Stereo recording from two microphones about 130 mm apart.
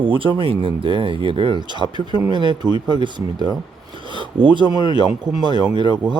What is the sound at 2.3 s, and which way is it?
Rub, 35° right (ahead or behind).